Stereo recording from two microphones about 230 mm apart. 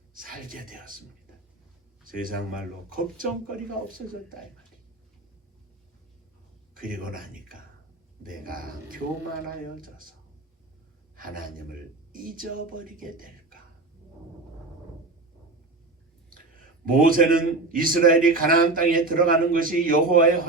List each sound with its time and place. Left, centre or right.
0.1 s a man's voice: right
2.9 s a man's voice: right
6.7 s a man's voice: right
11.2 s a man's voice: right
16.8 s a man's voice: right